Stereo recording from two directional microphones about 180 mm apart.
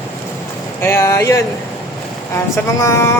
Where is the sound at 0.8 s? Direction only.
15° left (ahead or behind).